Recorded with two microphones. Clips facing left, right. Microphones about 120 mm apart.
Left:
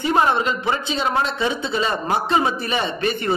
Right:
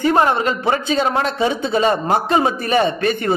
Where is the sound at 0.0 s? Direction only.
45° right (ahead or behind).